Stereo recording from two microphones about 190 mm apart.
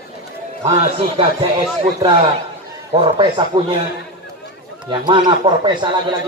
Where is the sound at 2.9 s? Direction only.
25° right (ahead or behind).